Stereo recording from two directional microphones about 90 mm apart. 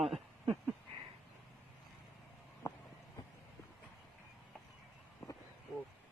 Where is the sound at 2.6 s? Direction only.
50° left (ahead or behind).